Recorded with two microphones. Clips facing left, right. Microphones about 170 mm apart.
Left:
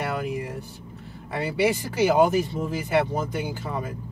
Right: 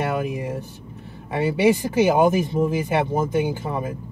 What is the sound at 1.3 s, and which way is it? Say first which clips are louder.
Speech: right 5 dB; 20° right (ahead or behind).